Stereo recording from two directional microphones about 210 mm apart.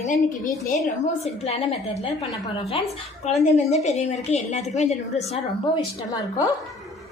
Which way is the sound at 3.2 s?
30° left (ahead or behind).